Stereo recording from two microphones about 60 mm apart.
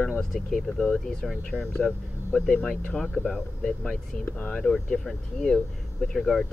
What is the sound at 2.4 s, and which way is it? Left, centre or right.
Speech, centre.